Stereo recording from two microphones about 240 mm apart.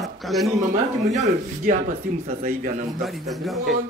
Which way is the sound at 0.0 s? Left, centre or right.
Centre.